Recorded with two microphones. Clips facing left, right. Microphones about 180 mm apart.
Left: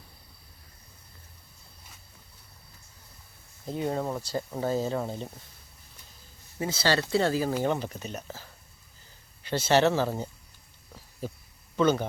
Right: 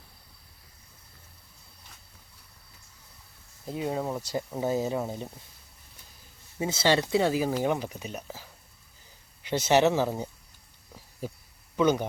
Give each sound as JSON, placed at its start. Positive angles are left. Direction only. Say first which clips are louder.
{"t": 3.7, "sound": "speech", "louder": "left 1 dB", "side_deg": -5}
{"t": 4.2, "sound": "speech", "louder": "even", "side_deg": -20}
{"t": 6.6, "sound": "speech", "louder": "right 2 dB", "side_deg": -20}
{"t": 11.8, "sound": "speech", "louder": "even", "side_deg": -15}